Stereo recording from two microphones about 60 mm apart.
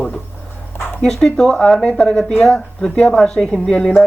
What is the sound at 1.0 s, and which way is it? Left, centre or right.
Speech, centre.